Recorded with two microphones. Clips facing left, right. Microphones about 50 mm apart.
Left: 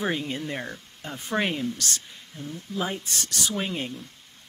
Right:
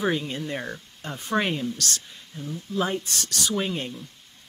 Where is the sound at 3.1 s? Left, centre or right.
Left.